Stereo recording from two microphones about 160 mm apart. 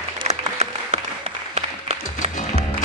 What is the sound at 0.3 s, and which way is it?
Applause, 40° right (ahead or behind).